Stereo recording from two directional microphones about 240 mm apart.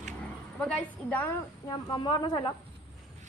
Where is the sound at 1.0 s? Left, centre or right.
Centre.